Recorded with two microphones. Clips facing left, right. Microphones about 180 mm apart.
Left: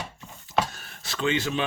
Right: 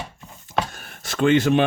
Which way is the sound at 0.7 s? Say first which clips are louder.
Right 5 dB; 50° right (ahead or behind).